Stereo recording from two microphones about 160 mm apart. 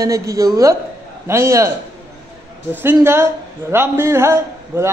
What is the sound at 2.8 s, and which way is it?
A woman's voice, 15° right (ahead or behind).